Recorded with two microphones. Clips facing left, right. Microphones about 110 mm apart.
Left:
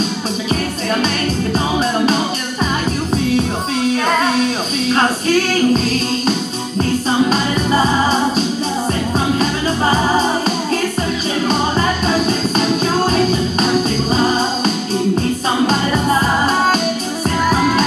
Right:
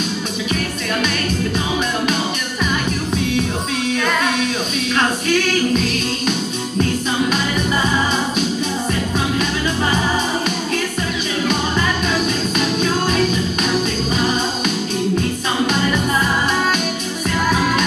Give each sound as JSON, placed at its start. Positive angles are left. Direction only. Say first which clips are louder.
{"t": 4.9, "sound": "music", "louder": "left 3 dB", "side_deg": 35}